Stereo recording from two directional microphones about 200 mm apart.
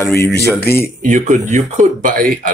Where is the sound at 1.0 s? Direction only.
40° right (ahead or behind).